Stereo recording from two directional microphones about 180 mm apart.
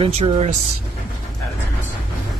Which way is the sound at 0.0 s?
35° right (ahead or behind).